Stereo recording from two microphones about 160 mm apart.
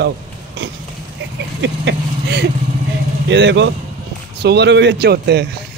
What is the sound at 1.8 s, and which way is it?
Speech, 90° right.